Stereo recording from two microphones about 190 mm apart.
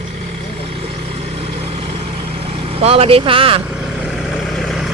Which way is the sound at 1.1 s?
35° right (ahead or behind).